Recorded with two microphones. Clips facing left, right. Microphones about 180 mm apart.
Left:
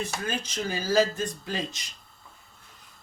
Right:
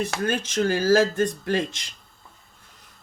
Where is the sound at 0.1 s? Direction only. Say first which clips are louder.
Right 7 dB; 75° right (ahead or behind).